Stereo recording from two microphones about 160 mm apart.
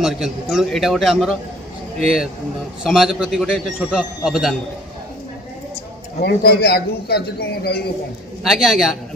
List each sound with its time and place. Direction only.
0.0 s a man's voice: centre (ahead or behind)
6.1 s a man's voice: 85° left
8.5 s a man's voice: centre (ahead or behind)